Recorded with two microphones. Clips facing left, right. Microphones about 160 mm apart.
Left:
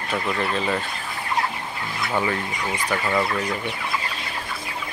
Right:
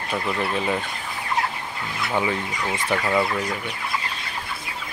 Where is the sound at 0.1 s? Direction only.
10° right (ahead or behind).